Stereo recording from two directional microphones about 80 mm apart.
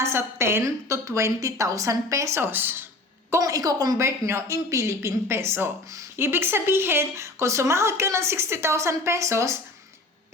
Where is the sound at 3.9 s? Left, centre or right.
Right.